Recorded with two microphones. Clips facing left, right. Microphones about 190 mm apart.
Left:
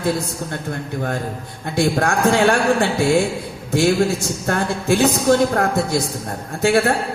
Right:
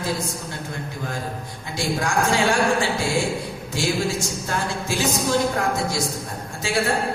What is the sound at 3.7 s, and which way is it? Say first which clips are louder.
A man's voice: left 8 dB; 60° left (ahead or behind).